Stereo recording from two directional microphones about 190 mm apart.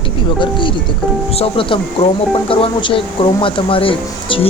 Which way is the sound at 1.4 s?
30° left (ahead or behind).